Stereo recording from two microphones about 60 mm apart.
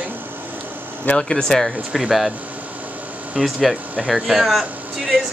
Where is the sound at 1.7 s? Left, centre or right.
Centre.